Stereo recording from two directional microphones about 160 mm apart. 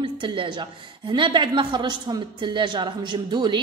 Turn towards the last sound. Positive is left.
turn(degrees=-30)  # may be behind; listen again after turning